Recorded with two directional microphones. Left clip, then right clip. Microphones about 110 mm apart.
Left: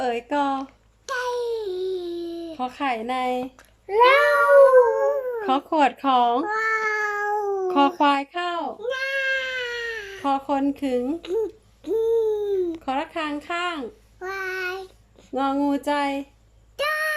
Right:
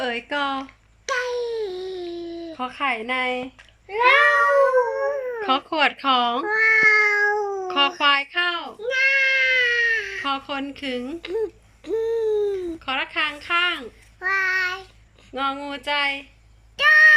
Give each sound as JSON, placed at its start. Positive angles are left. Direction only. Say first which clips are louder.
{"t": 0.0, "sound": "speech", "louder": "left 1 dB", "side_deg": 25}
{"t": 1.1, "sound": "a sound", "louder": "right 1 dB", "side_deg": 25}
{"t": 4.4, "sound": "howl", "louder": "left 4 dB", "side_deg": 25}
{"t": 5.4, "sound": "speech", "louder": "right 1 dB", "side_deg": 25}
{"t": 6.9, "sound": "cat", "louder": "right 6 dB", "side_deg": 40}
{"t": 7.7, "sound": "speech", "louder": "right 1 dB", "side_deg": 40}
{"t": 8.8, "sound": "cat", "louder": "right 9 dB", "side_deg": 30}
{"t": 11.8, "sound": "hoot", "louder": "left 2 dB", "side_deg": 15}
{"t": 12.4, "sound": "cat", "louder": "even", "side_deg": 25}
{"t": 12.8, "sound": "speech", "louder": "right 3 dB", "side_deg": 45}
{"t": 16.7, "sound": "a sound", "louder": "right 11 dB", "side_deg": 40}